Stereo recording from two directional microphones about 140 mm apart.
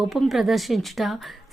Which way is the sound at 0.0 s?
Centre (ahead or behind).